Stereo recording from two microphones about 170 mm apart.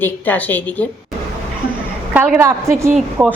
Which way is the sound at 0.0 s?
10° left (ahead or behind).